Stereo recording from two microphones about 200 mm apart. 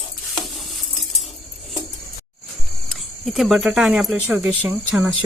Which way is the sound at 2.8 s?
Centre (ahead or behind).